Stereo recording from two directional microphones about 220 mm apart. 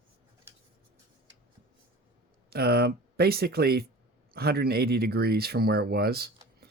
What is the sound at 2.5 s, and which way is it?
Speech, 45° right (ahead or behind).